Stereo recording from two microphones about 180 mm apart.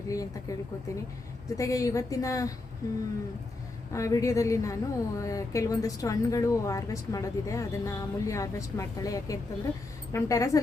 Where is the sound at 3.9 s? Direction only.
15° left (ahead or behind).